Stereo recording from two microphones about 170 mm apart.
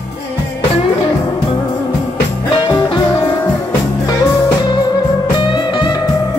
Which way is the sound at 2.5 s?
25° left (ahead or behind).